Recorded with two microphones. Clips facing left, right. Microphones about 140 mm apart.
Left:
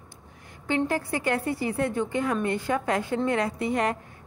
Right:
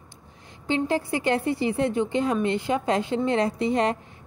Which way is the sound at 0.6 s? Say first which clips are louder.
Right 2 dB; 20° right (ahead or behind).